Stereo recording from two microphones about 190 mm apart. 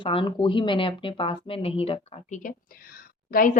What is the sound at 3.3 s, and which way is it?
Speech, 45° left (ahead or behind).